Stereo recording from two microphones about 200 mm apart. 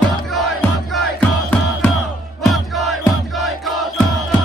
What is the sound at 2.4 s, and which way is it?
Battle cry, centre (ahead or behind).